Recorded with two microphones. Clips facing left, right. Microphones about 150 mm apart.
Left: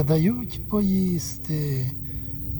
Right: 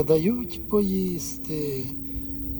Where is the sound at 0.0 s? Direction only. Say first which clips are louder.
Right 2 dB; 20° right (ahead or behind).